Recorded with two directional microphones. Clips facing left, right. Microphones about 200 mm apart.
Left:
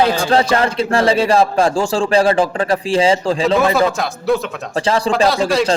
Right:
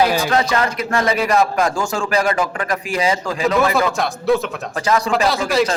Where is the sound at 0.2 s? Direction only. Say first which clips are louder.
Left 3 dB; 30° left (ahead or behind).